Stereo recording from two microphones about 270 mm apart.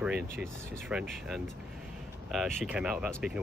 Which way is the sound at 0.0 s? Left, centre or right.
Centre.